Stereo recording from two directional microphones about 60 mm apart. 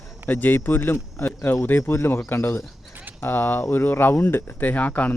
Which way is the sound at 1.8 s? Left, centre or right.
Left.